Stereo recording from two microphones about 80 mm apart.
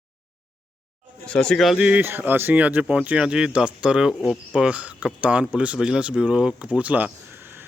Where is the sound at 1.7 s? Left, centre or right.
Centre.